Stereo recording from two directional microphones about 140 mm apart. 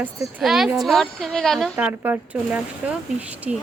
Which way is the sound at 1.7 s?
15° right (ahead or behind).